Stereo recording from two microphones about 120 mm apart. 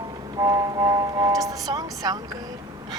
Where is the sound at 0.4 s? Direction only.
30° right (ahead or behind).